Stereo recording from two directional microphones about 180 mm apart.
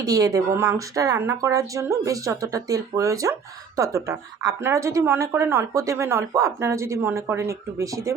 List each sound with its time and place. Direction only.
0.0 s a woman's voice: 20° right (ahead or behind)